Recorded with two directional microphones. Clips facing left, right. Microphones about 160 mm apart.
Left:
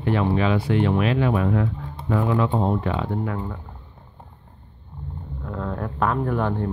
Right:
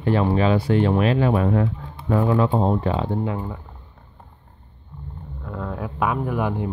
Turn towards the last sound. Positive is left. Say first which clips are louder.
# left 1 dB
turn(degrees=-10)  # may be behind; listen again after turning